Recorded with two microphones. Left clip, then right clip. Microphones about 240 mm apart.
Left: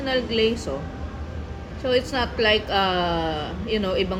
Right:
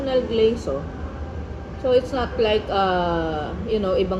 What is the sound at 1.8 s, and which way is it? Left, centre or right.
A woman's voice, left.